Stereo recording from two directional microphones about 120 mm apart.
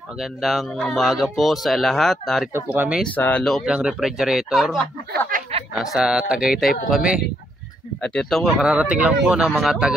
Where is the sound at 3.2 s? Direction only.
15° left (ahead or behind).